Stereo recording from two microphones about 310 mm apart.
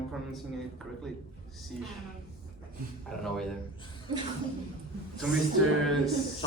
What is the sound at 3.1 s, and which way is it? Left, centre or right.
Speech, centre.